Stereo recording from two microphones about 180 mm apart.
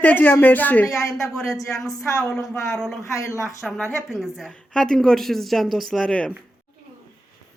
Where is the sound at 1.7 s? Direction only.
Centre (ahead or behind).